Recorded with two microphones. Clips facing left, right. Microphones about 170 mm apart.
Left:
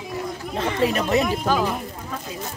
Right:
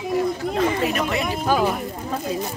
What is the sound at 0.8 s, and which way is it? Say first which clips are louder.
Speech: left 3 dB; 35° left (ahead or behind).